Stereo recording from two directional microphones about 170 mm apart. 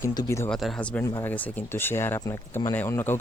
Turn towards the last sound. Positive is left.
turn(degrees=15)  # may be behind; listen again after turning